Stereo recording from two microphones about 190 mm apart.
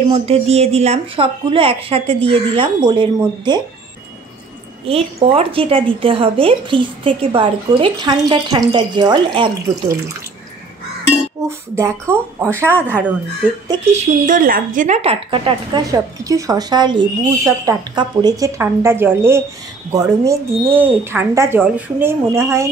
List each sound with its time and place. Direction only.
0.1 s a woman's voice: 35° right (ahead or behind)
4.8 s a woman's voice: 30° right (ahead or behind)
11.4 s speech: 15° right (ahead or behind)
13.9 s a woman's voice: 40° right (ahead or behind); by 22.7 s 15° right (ahead or behind)